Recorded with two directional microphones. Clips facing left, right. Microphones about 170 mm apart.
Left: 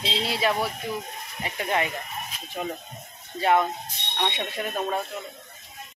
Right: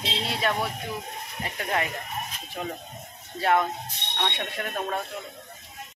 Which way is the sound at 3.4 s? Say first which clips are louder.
Left 2 dB; centre (ahead or behind).